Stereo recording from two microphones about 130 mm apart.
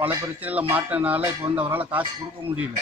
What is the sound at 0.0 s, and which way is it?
Speech, 15° right (ahead or behind).